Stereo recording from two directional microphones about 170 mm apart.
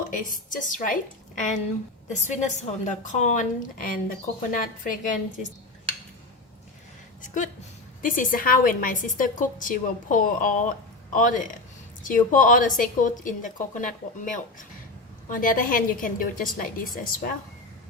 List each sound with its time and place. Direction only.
0.1 s a woman's voice: 50° left (ahead or behind)
2.0 s a woman's voice: 45° left (ahead or behind)
7.2 s a woman's voice: 45° left (ahead or behind)